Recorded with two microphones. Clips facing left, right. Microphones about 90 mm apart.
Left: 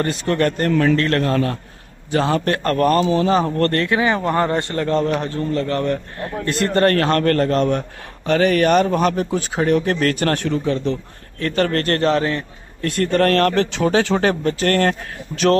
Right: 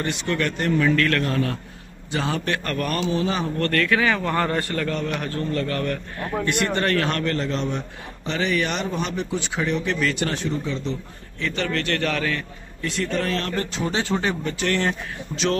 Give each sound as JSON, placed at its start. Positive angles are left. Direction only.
{"t": 0.0, "sound": "a man's voice", "side_deg": 45}
{"t": 0.9, "sound": "a man's voice", "side_deg": 30}
{"t": 3.7, "sound": "a man's voice", "side_deg": 25}
{"t": 6.4, "sound": "a man's voice", "side_deg": 40}
{"t": 12.1, "sound": "a man's voice", "side_deg": 30}
{"t": 12.8, "sound": "speech", "side_deg": 55}
{"t": 14.4, "sound": "a man's voice", "side_deg": 50}